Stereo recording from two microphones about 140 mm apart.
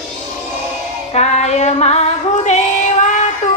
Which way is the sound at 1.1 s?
50° left (ahead or behind).